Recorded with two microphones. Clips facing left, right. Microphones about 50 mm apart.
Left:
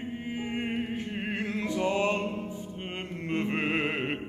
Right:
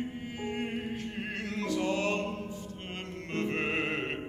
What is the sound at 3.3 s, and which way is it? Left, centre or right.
Music, centre.